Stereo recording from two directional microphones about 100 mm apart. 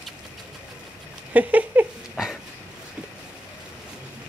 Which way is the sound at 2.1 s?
5° right (ahead or behind).